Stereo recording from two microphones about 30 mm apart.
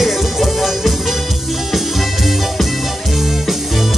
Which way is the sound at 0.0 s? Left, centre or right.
Centre.